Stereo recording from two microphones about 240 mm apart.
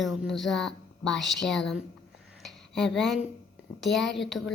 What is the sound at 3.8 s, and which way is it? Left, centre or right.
Speech, centre.